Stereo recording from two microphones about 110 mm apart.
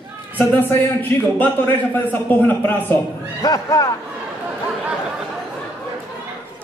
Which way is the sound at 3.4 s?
30° left (ahead or behind).